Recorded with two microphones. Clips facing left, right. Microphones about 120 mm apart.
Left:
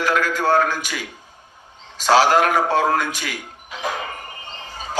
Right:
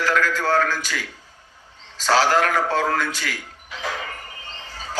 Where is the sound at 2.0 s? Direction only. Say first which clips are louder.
Left 3 dB; 15° left (ahead or behind).